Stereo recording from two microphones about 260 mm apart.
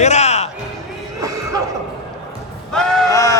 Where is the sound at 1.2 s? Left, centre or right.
Centre.